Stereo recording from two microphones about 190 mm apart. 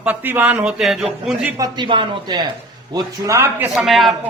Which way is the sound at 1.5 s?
20° right (ahead or behind).